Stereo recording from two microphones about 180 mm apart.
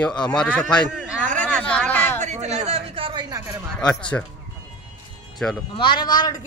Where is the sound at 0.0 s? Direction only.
5° left (ahead or behind).